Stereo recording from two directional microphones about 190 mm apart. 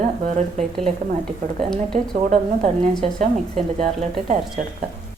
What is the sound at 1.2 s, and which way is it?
Speech, centre (ahead or behind).